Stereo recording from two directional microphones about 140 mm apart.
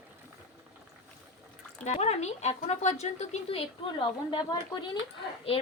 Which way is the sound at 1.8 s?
50° left (ahead or behind).